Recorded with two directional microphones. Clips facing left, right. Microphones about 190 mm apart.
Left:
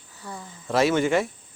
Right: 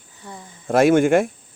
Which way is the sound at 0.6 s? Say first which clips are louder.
Right 6 dB; 50° right (ahead or behind).